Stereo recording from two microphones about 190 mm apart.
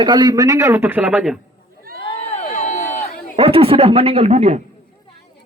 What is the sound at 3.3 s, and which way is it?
A man's voice, 30° right (ahead or behind).